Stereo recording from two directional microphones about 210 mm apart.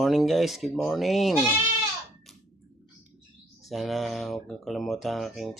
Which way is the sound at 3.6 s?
Centre (ahead or behind).